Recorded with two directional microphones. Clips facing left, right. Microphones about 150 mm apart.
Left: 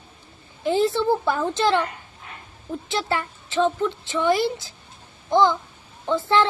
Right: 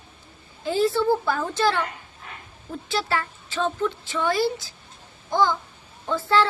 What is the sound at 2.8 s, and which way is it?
A child's voice, 20° left (ahead or behind).